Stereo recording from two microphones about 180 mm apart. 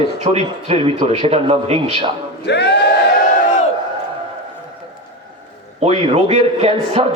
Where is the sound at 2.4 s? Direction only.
70° left (ahead or behind).